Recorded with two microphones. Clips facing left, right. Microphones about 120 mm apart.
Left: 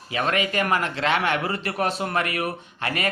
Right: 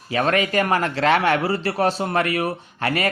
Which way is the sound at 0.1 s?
40° right (ahead or behind).